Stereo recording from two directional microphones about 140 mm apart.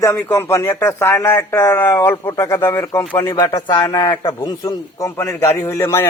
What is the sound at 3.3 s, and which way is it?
A man's voice, 30° left (ahead or behind).